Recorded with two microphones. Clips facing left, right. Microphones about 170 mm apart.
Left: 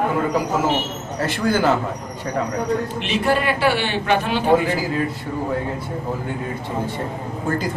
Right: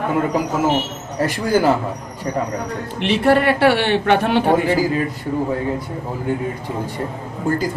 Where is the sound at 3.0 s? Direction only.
60° right (ahead or behind).